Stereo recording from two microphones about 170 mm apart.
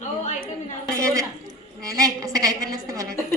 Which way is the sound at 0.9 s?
20° right (ahead or behind).